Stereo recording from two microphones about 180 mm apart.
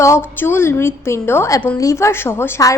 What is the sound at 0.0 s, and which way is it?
A woman's voice, 15° left (ahead or behind).